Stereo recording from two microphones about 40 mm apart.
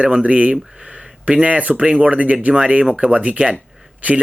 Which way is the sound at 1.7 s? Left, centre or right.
Right.